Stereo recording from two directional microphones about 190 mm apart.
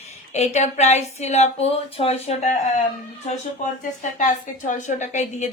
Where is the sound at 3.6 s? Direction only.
40° left (ahead or behind).